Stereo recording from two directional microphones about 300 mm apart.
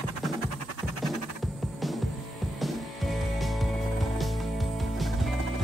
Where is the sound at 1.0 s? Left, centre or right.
Centre.